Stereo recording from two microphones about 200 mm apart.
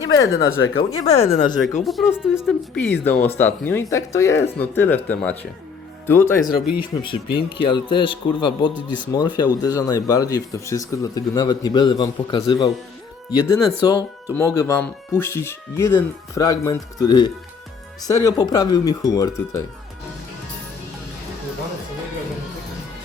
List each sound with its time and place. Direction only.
0.0 s speech: 20° left (ahead or behind)
1.0 s speech: 35° left (ahead or behind)
1.8 s speech: centre (ahead or behind)
6.9 s speech: 25° left (ahead or behind)